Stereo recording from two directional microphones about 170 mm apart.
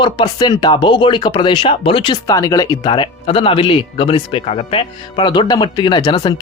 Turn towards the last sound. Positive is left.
turn(degrees=25)  # may be behind; listen again after turning